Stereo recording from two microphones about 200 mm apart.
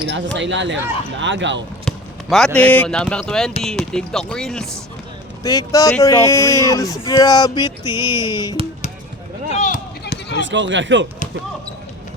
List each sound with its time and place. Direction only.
0.1 s speech: 65° right (ahead or behind)
2.6 s speech: 5° left (ahead or behind)
5.4 s speech: 15° left (ahead or behind)
7.1 s a sound: 20° left (ahead or behind)
9.5 s a sound: 35° left (ahead or behind)
10.1 s run: 60° left (ahead or behind)
10.5 s speech: 65° right (ahead or behind)